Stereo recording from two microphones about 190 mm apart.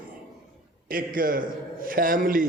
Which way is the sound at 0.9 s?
50° right (ahead or behind).